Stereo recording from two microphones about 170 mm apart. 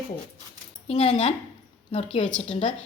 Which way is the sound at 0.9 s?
40° left (ahead or behind).